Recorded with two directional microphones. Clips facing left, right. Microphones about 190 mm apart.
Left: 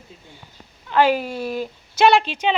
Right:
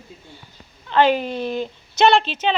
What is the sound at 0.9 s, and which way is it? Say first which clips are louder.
Speech: right 1 dB; 10° left (ahead or behind).